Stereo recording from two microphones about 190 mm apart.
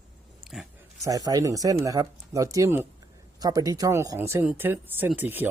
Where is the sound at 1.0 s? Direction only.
20° right (ahead or behind).